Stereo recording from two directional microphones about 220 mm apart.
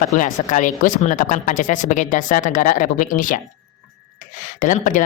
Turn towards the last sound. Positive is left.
turn(degrees=35)  # may be behind; listen again after turning